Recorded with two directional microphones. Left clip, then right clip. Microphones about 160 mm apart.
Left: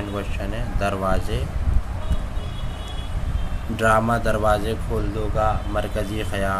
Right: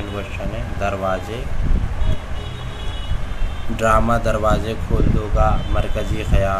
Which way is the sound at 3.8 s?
25° left (ahead or behind).